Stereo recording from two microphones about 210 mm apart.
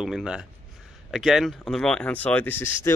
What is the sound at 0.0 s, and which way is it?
Speech, 5° right (ahead or behind).